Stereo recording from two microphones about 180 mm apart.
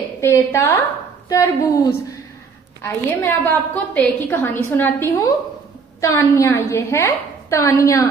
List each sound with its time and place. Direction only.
0.2 s a woman's voice: 15° left (ahead or behind)